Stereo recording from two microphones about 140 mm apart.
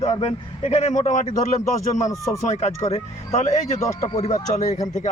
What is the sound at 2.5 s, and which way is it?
A man's voice, 50° left (ahead or behind).